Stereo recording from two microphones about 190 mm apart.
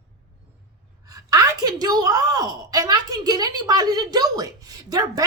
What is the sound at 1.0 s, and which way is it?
A woman's voice, 20° right (ahead or behind).